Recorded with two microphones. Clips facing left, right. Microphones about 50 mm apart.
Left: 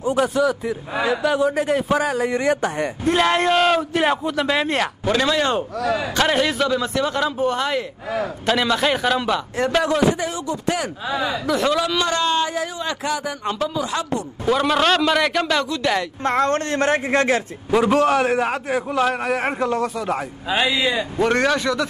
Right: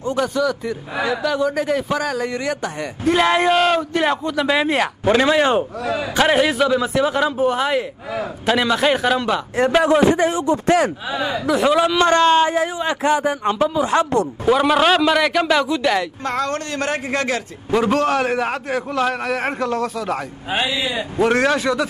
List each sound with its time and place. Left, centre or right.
0.0 s a man's voice: centre
2.4 s a man's voice: left
3.1 s a man's voice: centre
5.0 s speech: right
6.1 s a man's voice: centre
9.6 s speech: centre
11.4 s speech: centre
12.0 s speech: right
14.4 s speech: centre
16.3 s a man's voice: left
17.6 s a man's voice: centre
20.6 s speech: left
21.2 s speech: centre